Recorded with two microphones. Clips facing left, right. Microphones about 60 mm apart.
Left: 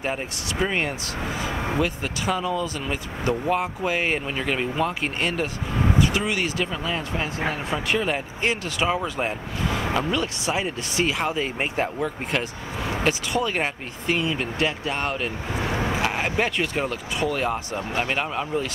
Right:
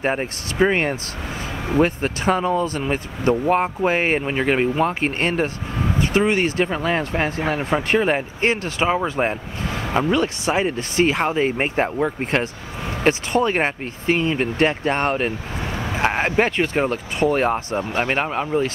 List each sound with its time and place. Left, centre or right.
0.0 s speech: right
9.7 s vehicle: centre
9.9 s speech: right
15.6 s vehicle: centre
16.0 s speech: right